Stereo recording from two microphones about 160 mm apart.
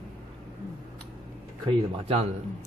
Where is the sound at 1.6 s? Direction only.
40° right (ahead or behind).